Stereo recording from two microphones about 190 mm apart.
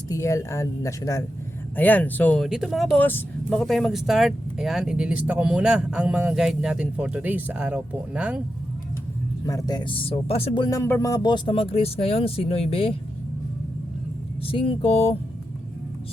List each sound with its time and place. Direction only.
0.1 s speech: 15° left (ahead or behind); by 8.4 s 5° right (ahead or behind)
9.5 s speech: 20° left (ahead or behind)
14.4 s speech: 30° left (ahead or behind)